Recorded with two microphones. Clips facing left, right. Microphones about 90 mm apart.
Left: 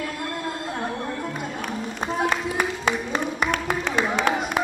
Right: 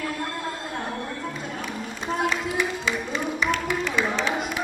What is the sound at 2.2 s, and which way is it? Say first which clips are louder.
Music: left 1 dB; 50° left (ahead or behind).